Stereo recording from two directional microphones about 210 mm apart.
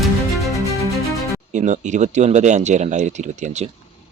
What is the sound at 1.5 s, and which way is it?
Speech, 35° right (ahead or behind).